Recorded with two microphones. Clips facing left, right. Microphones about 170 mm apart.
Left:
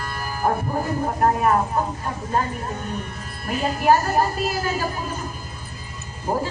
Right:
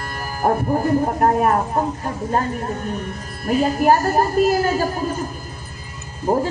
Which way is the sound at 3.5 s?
45° right (ahead or behind).